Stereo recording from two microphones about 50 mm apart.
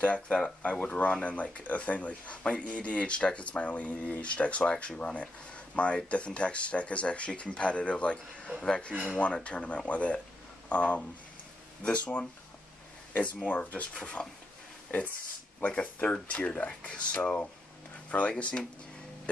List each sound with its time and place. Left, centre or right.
0.0 s speech: left